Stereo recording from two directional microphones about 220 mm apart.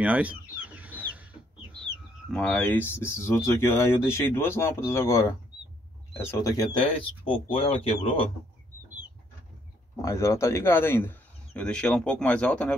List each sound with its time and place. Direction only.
0.0 s chicken: 5° right (ahead or behind)
2.3 s speech: 5° left (ahead or behind)
6.3 s speech: 15° left (ahead or behind)
10.0 s speech: 15° left (ahead or behind)